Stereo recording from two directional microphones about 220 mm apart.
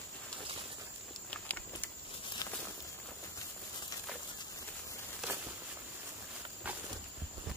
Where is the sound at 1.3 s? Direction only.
5° left (ahead or behind).